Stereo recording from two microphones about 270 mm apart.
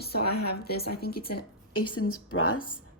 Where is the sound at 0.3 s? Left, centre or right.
Left.